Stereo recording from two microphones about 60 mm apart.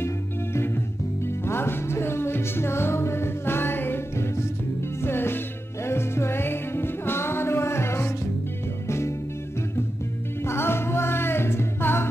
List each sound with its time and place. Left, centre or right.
0.0 s music: left
10.4 s music: left